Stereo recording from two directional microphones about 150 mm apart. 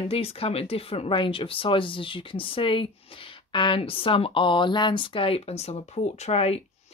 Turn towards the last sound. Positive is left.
turn(degrees=40)  # may be behind; listen again after turning